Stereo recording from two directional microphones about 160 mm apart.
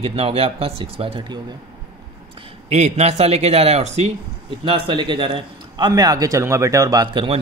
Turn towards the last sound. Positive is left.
turn(degrees=-25)  # may be behind; listen again after turning